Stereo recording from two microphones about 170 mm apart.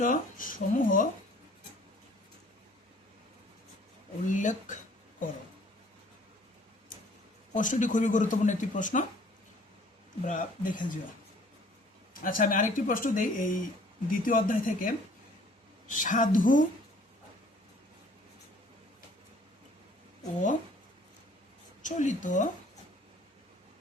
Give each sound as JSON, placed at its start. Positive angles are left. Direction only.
{"t": 0.0, "sound": "speech", "side_deg": 50}
{"t": 4.3, "sound": "speech", "side_deg": 50}
{"t": 7.5, "sound": "speech", "side_deg": 50}
{"t": 10.2, "sound": "speech", "side_deg": 50}
{"t": 12.2, "sound": "speech", "side_deg": 55}
{"t": 21.8, "sound": "speech", "side_deg": 45}